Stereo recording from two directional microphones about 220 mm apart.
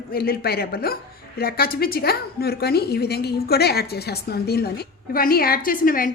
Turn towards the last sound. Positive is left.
turn(degrees=40)  # may be behind; listen again after turning